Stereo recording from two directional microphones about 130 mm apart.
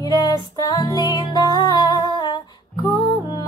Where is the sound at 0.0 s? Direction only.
30° left (ahead or behind).